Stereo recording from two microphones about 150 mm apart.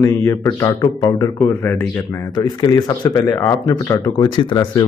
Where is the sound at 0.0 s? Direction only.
20° left (ahead or behind).